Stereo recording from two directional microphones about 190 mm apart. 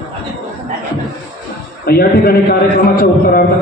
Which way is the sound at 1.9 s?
50° left (ahead or behind).